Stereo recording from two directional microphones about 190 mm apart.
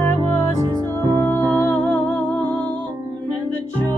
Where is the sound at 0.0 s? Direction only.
10° left (ahead or behind).